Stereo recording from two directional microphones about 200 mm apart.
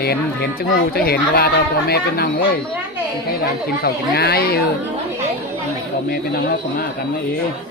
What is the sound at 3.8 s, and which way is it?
Speech, 50° left (ahead or behind).